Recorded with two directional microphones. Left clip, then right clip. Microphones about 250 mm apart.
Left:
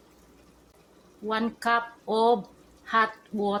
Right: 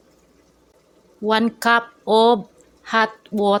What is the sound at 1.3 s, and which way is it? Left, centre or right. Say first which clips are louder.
A woman's voice: right 9 dB; right.